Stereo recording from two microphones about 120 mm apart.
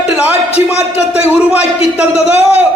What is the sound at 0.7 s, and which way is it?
A man's voice, 10° right (ahead or behind).